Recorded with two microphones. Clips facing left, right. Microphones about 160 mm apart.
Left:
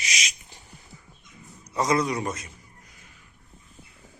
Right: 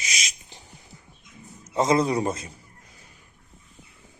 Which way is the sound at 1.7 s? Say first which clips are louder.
Right 3 dB; 25° right (ahead or behind).